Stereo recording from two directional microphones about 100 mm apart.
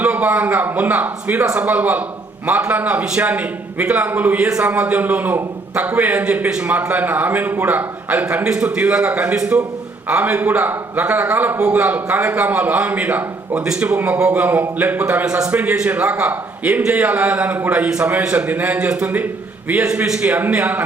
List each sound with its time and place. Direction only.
0.0 s a man's voice: 15° right (ahead or behind)